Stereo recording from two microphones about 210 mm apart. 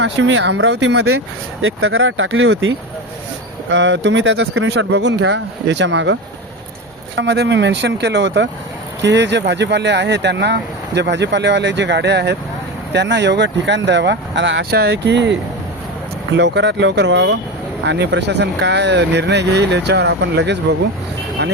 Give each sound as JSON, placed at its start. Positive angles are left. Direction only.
{"t": 0.0, "sound": "speech", "side_deg": -60}
{"t": 1.6, "sound": "speech", "side_deg": -70}
{"t": 7.2, "sound": "speech", "side_deg": -55}